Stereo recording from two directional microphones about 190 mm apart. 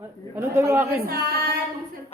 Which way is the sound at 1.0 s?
55° right (ahead or behind).